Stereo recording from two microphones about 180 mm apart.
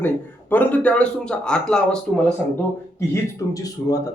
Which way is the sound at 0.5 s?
10° left (ahead or behind).